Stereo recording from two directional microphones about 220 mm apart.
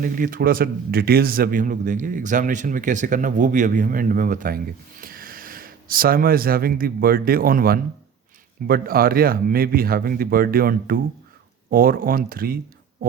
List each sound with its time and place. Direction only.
0.0 s a man's voice: 40° right (ahead or behind)